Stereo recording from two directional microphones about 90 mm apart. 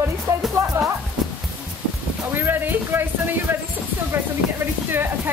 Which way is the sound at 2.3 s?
25° right (ahead or behind).